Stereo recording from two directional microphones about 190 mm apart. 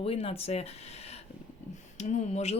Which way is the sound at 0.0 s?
30° left (ahead or behind).